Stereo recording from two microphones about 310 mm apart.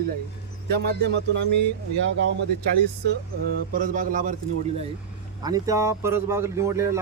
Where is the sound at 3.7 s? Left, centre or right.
Right.